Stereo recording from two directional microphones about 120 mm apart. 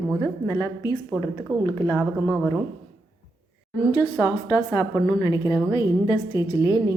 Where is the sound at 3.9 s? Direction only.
35° left (ahead or behind).